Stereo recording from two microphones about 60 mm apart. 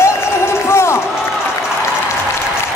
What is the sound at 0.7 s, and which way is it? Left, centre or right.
Run, left.